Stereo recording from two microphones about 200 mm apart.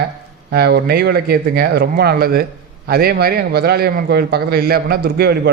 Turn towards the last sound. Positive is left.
turn(degrees=-50)  # may be behind; listen again after turning